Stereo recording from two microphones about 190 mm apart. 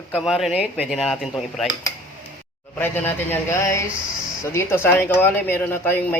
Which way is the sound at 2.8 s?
10° left (ahead or behind).